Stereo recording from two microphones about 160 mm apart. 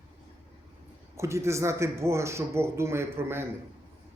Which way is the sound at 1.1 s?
15° right (ahead or behind).